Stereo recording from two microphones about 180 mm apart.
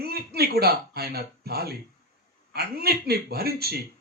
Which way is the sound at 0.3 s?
60° right (ahead or behind).